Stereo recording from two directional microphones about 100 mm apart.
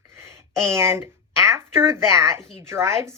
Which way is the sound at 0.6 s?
25° right (ahead or behind).